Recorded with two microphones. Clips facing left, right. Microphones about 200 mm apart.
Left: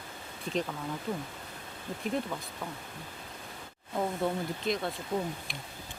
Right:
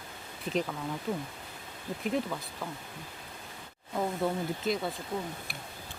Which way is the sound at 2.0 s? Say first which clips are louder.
Right 1 dB; centre (ahead or behind).